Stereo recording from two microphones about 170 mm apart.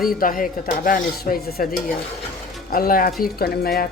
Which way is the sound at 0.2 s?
55° left (ahead or behind).